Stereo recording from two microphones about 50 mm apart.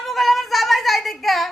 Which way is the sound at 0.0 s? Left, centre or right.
Centre.